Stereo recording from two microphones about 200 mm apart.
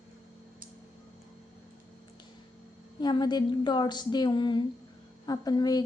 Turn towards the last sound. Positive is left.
turn(degrees=20)  # may be behind; listen again after turning